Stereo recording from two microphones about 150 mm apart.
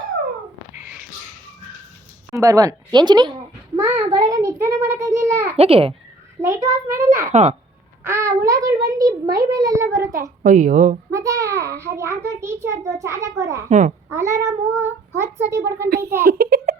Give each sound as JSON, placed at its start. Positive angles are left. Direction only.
{"t": 2.4, "sound": "a child's voice", "side_deg": -20}
{"t": 5.5, "sound": "a child's voice", "side_deg": -40}
{"t": 6.4, "sound": "a child's voice", "side_deg": -15}
{"t": 10.4, "sound": "a woman's voice", "side_deg": -55}
{"t": 11.1, "sound": "a child's voice", "side_deg": -20}
{"t": 13.7, "sound": "a child's voice", "side_deg": -55}
{"t": 14.1, "sound": "a child's voice", "side_deg": -20}
{"t": 16.2, "sound": "a child's voice", "side_deg": -90}